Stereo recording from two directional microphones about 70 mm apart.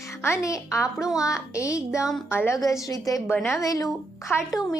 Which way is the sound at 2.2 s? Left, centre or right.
Left.